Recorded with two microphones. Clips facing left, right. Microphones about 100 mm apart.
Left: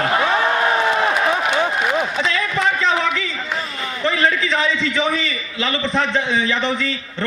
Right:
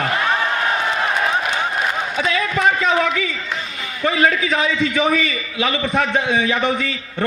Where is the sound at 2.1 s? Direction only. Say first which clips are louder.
Right 1 dB; 10° right (ahead or behind).